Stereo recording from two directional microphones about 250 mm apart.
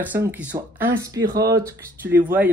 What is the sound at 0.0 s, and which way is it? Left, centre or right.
A woman's voice, centre.